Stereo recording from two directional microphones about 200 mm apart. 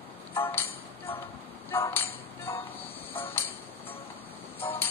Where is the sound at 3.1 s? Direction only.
10° left (ahead or behind).